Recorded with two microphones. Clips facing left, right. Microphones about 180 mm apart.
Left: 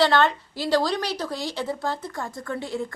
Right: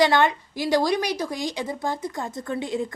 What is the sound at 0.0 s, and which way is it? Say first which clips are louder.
A woman's voice: right 1 dB; 15° right (ahead or behind).